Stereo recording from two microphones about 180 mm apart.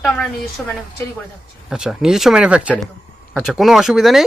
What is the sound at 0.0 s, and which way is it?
Speech, centre (ahead or behind).